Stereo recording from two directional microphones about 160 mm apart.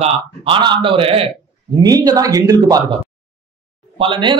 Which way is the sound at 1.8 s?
25° right (ahead or behind).